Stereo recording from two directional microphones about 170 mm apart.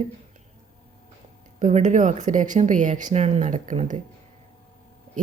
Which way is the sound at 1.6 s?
45° right (ahead or behind).